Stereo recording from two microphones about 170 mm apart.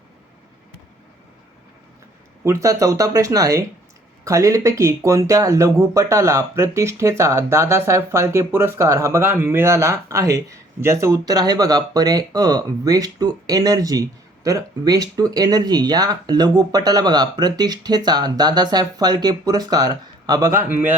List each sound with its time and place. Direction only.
2.4 s speech: 15° right (ahead or behind)